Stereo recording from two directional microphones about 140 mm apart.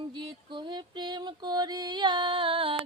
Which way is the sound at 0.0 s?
35° right (ahead or behind).